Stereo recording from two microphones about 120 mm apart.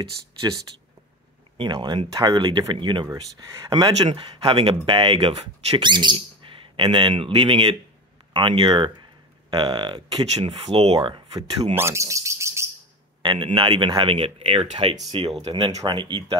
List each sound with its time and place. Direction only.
1.6 s speech: 40° right (ahead or behind)
10.4 s speech: 55° right (ahead or behind)
11.0 s speech: 40° right (ahead or behind)
11.7 s speech: 20° right (ahead or behind)
13.2 s a man's voice: 40° right (ahead or behind)